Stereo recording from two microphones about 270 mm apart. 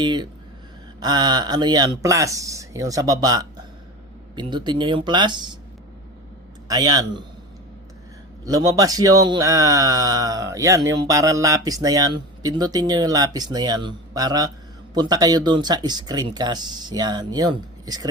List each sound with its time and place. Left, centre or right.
0.0 s speech: centre
6.7 s speech: centre
8.4 s speech: centre